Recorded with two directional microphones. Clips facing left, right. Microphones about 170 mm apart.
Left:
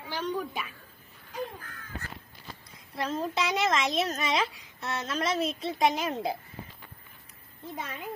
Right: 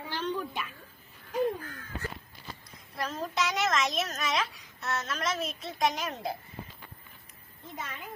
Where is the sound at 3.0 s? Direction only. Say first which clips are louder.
Left 2 dB; 30° left (ahead or behind).